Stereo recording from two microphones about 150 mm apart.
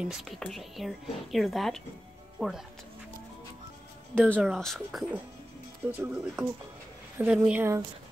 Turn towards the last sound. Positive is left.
turn(degrees=-15)  # may be behind; listen again after turning